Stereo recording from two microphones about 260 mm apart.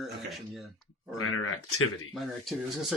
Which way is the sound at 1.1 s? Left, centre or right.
Left.